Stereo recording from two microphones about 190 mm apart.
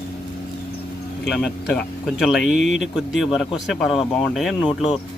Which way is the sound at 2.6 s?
40° right (ahead or behind).